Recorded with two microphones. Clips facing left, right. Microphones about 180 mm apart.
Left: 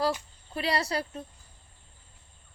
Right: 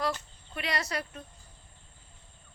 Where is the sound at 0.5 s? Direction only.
30° left (ahead or behind).